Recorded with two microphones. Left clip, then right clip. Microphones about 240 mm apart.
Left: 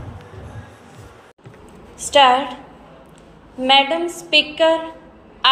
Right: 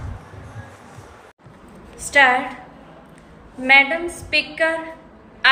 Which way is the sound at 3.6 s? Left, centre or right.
Centre.